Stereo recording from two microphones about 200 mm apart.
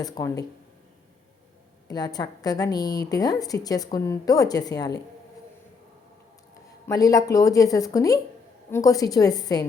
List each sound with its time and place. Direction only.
0.0 s speech: 15° left (ahead or behind)
1.9 s a woman's voice: 20° left (ahead or behind)
6.8 s speech: 20° left (ahead or behind)